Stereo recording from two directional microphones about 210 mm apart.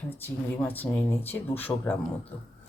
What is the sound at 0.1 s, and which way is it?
Speech, 10° left (ahead or behind).